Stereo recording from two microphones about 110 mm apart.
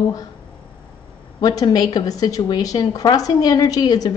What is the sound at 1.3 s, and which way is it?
A woman's voice, 35° left (ahead or behind).